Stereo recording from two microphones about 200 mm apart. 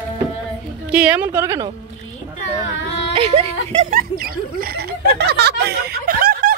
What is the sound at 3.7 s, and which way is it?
Speech, 40° right (ahead or behind).